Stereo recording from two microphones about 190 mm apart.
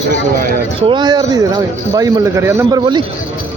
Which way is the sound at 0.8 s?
25° right (ahead or behind).